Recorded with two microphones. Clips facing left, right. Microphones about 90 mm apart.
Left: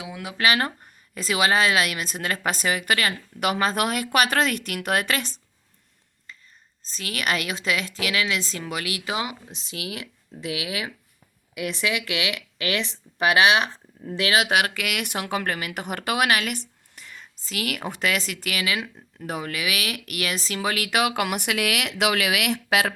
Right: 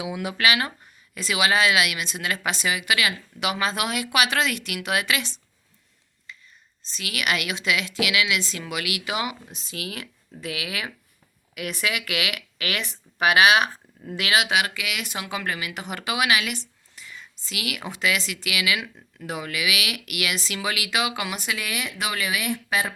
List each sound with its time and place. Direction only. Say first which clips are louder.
0.0 s speech: right 5 dB; 10° right (ahead or behind)
0.3 s a woman's voice: left 2 dB; 40° left (ahead or behind)
6.8 s a woman's voice: even; 40° left (ahead or behind)
11.9 s speech: left 1 dB; 25° left (ahead or behind)
14.2 s a woman's voice: left 1 dB; 35° left (ahead or behind)
14.4 s speech: left 2 dB; 50° left (ahead or behind); by 22.9 s 80° left